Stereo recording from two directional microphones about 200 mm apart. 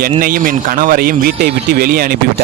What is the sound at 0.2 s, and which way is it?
Speech, 45° right (ahead or behind).